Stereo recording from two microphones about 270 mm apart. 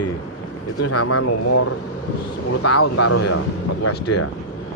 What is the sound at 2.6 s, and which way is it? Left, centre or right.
Speech, left.